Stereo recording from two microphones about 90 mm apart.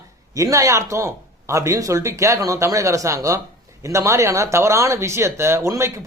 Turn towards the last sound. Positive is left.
turn(degrees=-35)  # may be behind; listen again after turning